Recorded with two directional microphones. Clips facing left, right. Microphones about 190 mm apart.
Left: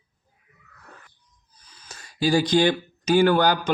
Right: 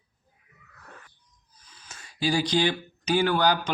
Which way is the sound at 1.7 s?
40° left (ahead or behind).